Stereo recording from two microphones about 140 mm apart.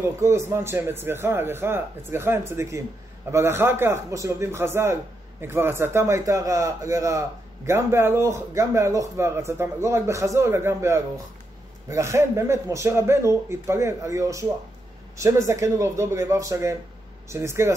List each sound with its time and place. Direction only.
0.0 s a man's voice: 20° right (ahead or behind)